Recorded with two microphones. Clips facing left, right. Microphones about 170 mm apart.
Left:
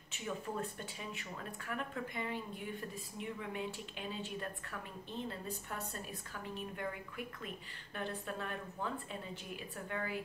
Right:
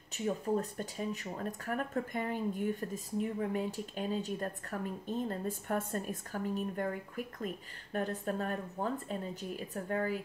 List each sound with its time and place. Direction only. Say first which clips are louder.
0.1 s speech: right 8 dB; 40° right (ahead or behind)